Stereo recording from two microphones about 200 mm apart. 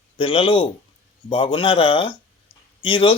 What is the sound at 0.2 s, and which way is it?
Speech, 25° left (ahead or behind).